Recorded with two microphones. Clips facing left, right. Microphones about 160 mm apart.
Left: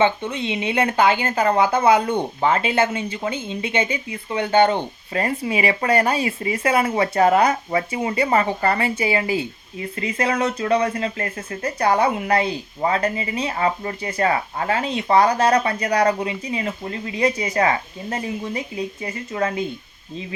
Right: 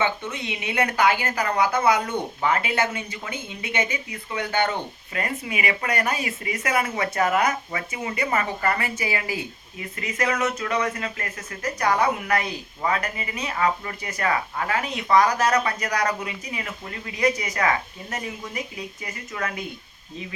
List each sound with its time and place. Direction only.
0.0 s a woman's voice: 30° left (ahead or behind)